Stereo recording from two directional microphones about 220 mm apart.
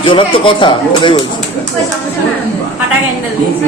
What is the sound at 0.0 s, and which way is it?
Speech, 20° left (ahead or behind).